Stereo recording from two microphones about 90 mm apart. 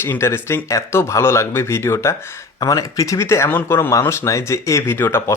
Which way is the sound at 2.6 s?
40° left (ahead or behind).